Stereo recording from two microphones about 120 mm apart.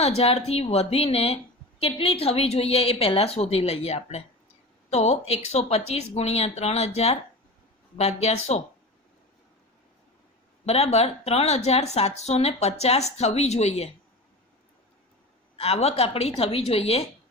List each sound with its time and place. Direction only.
0.2 s a woman's voice: 60° left (ahead or behind)
10.7 s a woman's voice: 60° left (ahead or behind)
15.5 s a woman's voice: 60° left (ahead or behind)